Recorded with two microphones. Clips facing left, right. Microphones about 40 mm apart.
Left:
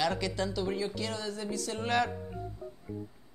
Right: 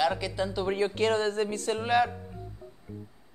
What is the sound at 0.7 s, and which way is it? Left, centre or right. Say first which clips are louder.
Speech: right 7 dB; right.